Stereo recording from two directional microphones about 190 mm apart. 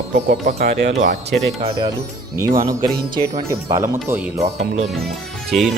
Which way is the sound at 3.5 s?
15° right (ahead or behind).